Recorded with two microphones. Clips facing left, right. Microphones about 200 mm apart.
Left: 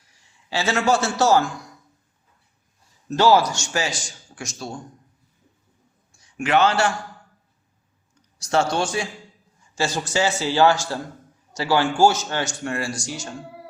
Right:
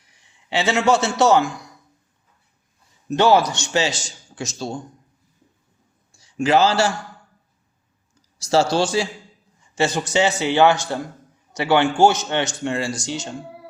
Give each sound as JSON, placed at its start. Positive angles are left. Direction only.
{"t": 0.5, "sound": "a man's voice", "side_deg": -20}
{"t": 3.1, "sound": "a man's voice", "side_deg": -15}
{"t": 6.3, "sound": "a man's voice", "side_deg": -30}
{"t": 8.8, "sound": "a man's voice", "side_deg": -25}